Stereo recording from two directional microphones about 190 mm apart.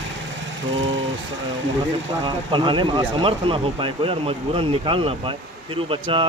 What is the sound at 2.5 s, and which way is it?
Speech, 25° right (ahead or behind).